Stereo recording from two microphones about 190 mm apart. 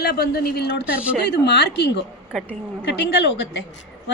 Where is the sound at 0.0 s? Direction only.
55° left (ahead or behind).